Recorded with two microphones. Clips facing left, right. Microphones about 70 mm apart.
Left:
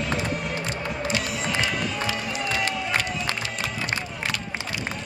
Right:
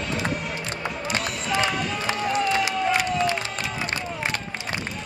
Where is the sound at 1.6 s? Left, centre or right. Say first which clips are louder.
Right 1 dB; right.